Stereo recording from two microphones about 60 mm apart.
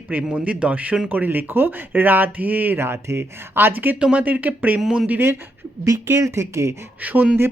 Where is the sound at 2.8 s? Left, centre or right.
Right.